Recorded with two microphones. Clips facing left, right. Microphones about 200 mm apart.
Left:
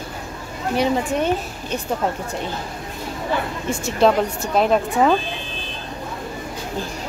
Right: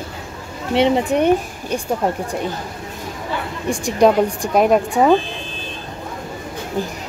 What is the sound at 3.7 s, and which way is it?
A woman's voice, 15° right (ahead or behind).